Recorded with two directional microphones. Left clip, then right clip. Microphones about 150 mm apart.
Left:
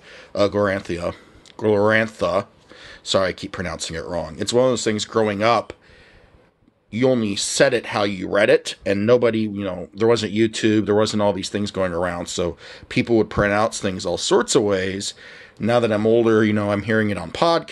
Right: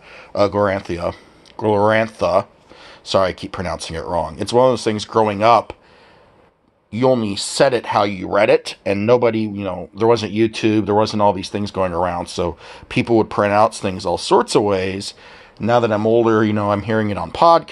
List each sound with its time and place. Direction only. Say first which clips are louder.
0.1 s speech: right 3 dB; 15° left (ahead or behind)
6.9 s speech: right 3 dB; 20° left (ahead or behind)